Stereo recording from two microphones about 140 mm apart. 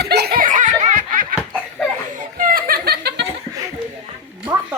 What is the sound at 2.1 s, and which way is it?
Chuckle, 85° right.